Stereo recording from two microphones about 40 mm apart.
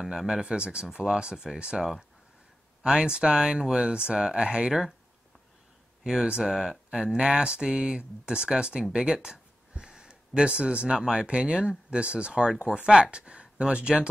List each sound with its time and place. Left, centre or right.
0.0 s speech: centre
6.4 s speech: centre
8.9 s a sound: right
10.5 s speech: right